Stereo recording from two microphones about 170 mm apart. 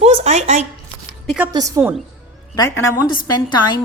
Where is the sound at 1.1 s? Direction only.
5° right (ahead or behind).